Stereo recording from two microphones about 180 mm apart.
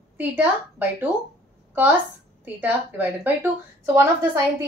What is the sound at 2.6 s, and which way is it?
A woman's voice, 10° right (ahead or behind).